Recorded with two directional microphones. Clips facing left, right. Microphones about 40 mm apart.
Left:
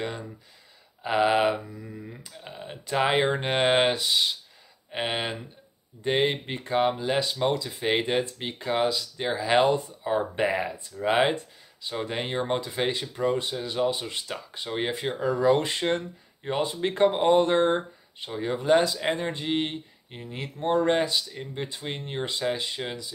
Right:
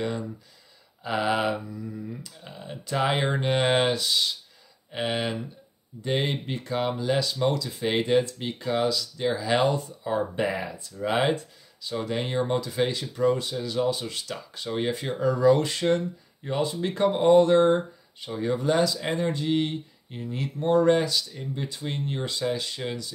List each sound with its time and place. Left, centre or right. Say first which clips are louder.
1.0 s speech: left 3 dB; left